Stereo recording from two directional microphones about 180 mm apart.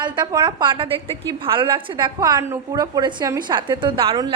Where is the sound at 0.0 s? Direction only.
25° right (ahead or behind).